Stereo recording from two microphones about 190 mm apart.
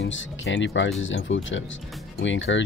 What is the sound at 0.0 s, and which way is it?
Speech, 80° left.